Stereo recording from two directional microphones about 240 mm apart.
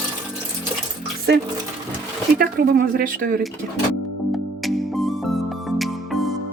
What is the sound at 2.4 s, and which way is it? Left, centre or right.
Speech, right.